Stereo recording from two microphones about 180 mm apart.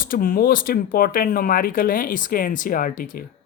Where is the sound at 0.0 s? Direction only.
50° left (ahead or behind).